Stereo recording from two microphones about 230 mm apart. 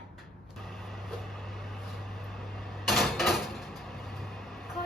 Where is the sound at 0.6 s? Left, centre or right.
Centre.